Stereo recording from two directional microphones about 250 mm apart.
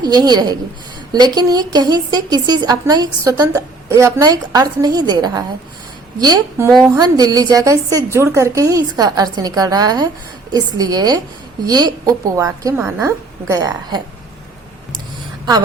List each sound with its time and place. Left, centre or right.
0.0 s a woman's voice: centre
6.7 s a woman's voice: centre
6.9 s a woman's voice: centre